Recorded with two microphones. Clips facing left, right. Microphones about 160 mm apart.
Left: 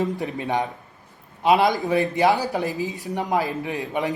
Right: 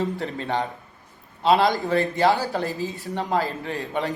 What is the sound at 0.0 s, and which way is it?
A man's voice, 15° left (ahead or behind).